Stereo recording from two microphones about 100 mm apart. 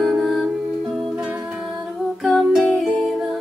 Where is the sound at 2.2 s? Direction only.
Centre (ahead or behind).